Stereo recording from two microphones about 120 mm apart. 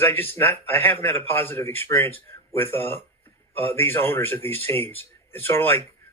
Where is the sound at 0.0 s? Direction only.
20° left (ahead or behind).